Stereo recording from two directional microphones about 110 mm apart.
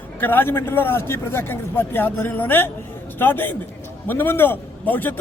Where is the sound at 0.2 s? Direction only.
20° left (ahead or behind).